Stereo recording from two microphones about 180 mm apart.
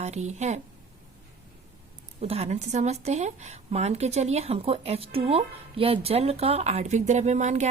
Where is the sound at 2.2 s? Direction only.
35° right (ahead or behind).